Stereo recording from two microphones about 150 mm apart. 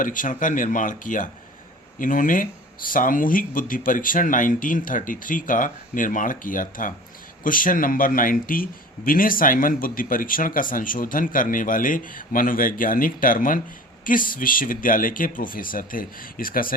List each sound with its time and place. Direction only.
0.0 s a man's voice: 65° left (ahead or behind)